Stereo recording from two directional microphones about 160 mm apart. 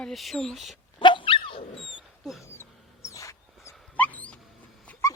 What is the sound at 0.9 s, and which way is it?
Dog, 30° left (ahead or behind).